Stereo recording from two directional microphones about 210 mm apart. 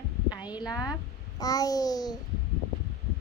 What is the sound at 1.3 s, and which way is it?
Babbling, 15° left (ahead or behind).